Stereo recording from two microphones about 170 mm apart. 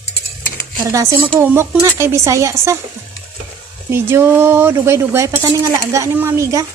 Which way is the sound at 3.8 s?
15° right (ahead or behind).